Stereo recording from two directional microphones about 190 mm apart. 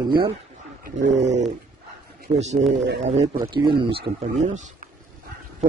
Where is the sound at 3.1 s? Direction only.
35° right (ahead or behind).